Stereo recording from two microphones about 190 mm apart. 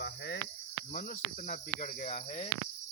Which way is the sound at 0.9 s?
50° left (ahead or behind).